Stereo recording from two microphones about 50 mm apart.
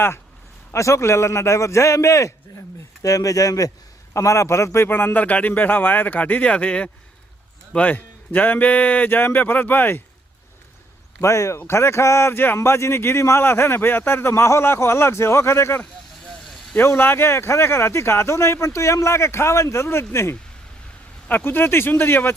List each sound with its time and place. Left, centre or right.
0.7 s a man's voice: left
4.1 s speech: left
4.9 s speech: left
5.1 s a man's voice: left
11.2 s speech: left
11.7 s speech: left
13.4 s speech: left
14.4 s speech: left
16.8 s speech: left
21.2 s speech: left